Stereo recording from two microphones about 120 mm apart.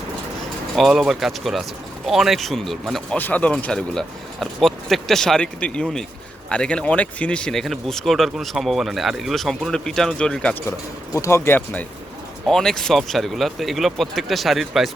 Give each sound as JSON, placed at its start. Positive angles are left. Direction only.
{"t": 0.8, "sound": "speech", "side_deg": 0}
{"t": 3.2, "sound": "speech", "side_deg": 15}
{"t": 10.7, "sound": "speech", "side_deg": 25}
{"t": 12.5, "sound": "speech", "side_deg": 5}